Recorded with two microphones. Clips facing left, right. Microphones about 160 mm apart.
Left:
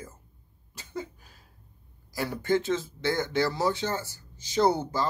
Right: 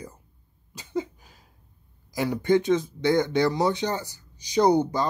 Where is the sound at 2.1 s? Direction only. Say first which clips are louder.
Right 5 dB; 15° right (ahead or behind).